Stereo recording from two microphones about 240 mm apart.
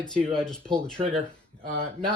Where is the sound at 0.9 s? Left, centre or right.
Right.